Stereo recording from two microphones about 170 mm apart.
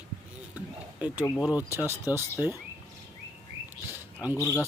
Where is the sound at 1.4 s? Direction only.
5° right (ahead or behind).